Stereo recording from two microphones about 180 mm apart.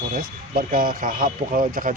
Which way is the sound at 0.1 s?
55° right (ahead or behind).